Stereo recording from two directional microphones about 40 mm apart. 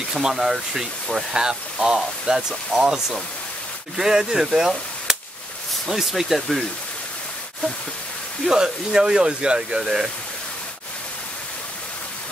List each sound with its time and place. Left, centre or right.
0.1 s speech: centre
8.5 s speech: centre